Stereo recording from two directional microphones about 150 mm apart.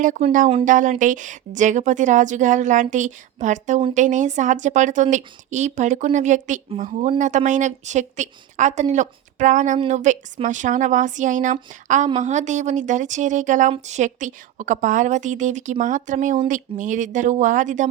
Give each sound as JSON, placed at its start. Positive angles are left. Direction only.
{"t": 0.0, "sound": "a woman's voice", "side_deg": -60}